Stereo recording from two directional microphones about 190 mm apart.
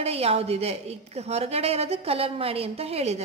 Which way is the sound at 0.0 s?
30° right (ahead or behind).